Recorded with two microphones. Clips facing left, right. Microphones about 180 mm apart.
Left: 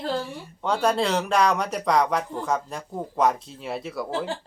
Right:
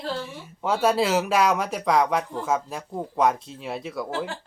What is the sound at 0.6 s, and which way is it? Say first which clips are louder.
Speech: right 1 dB; 5° right (ahead or behind).